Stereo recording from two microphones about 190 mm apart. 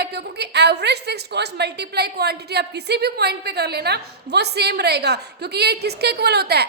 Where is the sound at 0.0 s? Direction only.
60° right (ahead or behind).